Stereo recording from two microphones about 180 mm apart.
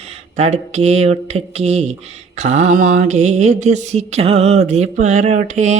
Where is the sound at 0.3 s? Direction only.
40° right (ahead or behind).